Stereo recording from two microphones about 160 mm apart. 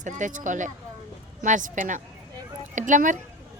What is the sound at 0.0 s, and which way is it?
Speech, 50° right (ahead or behind).